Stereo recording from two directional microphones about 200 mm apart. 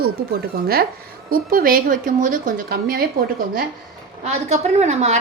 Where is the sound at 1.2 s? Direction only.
45° right (ahead or behind).